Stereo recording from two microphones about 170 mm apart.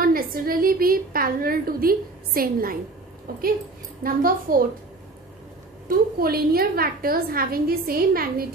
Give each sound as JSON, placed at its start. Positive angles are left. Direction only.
{"t": 0.0, "sound": "a woman's voice", "side_deg": -60}
{"t": 5.9, "sound": "a woman's voice", "side_deg": -60}